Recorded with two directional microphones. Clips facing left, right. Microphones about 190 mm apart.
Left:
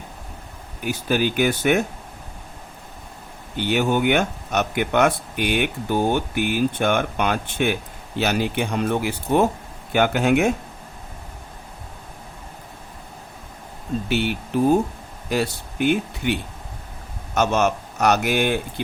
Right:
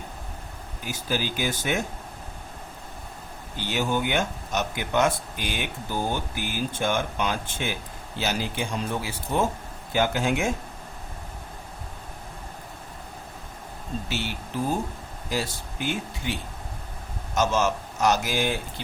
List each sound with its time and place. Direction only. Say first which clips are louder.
0.9 s speech: left 7 dB; 60° left (ahead or behind)
3.6 s speech: left 6 dB; 60° left (ahead or behind)
14.1 s speech: left 11 dB; 60° left (ahead or behind)